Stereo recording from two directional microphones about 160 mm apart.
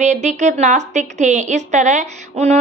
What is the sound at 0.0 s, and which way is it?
A woman's voice, 50° right (ahead or behind).